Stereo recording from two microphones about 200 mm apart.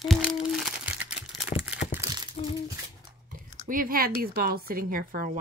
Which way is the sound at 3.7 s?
45° right (ahead or behind).